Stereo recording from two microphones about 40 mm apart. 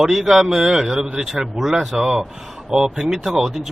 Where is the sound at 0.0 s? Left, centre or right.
Centre.